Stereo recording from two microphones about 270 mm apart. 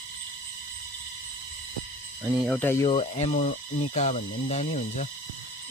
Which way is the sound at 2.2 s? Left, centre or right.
Centre.